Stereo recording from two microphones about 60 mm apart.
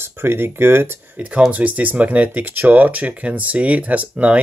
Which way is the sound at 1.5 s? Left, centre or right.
Right.